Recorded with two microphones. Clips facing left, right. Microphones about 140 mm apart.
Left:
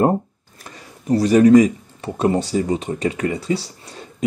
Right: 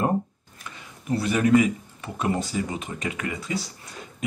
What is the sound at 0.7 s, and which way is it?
Speech, 40° left (ahead or behind).